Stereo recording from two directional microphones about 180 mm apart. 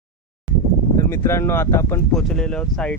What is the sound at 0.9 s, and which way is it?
Speech, 15° left (ahead or behind).